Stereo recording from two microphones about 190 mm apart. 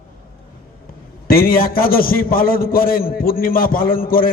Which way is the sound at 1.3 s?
50° left (ahead or behind).